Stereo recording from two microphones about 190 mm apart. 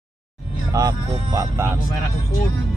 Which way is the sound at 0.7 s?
20° right (ahead or behind).